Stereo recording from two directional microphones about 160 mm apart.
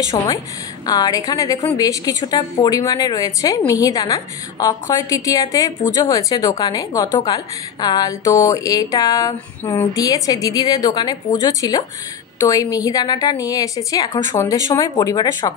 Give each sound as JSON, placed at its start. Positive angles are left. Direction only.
{"t": 0.2, "sound": "a woman's voice", "side_deg": 25}